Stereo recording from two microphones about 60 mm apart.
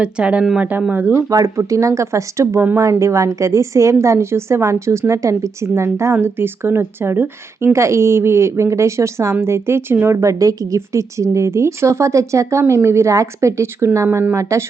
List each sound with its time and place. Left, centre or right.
0.0 s speech: centre
1.3 s speech: right
6.2 s speech: right
10.2 s a woman's voice: right
10.8 s speech: right